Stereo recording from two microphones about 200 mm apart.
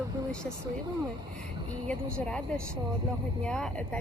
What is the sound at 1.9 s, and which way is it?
A woman's voice, 5° left (ahead or behind).